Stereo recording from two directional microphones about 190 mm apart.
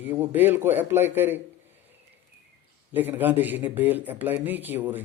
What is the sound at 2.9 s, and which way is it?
Speech, 10° right (ahead or behind).